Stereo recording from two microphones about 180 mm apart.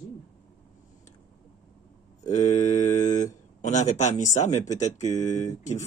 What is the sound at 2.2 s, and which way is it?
Speech, 40° left (ahead or behind).